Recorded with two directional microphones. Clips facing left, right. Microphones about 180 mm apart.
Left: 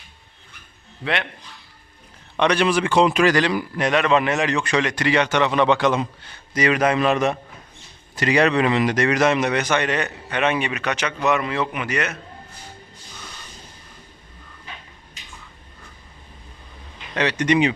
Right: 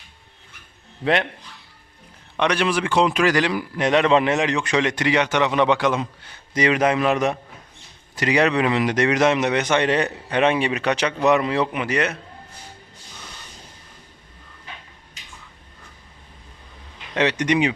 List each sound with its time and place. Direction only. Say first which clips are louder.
1.0 s speech: right 5 dB; 40° right (ahead or behind)
2.3 s a man's voice: left 2 dB; 5° right (ahead or behind)
3.8 s a man's voice: right 2 dB; 25° right (ahead or behind); by 6.3 s 5° right (ahead or behind)
6.3 s a man's voice: even; 20° right (ahead or behind)
17.2 s a man's voice: left 1 dB; 20° right (ahead or behind)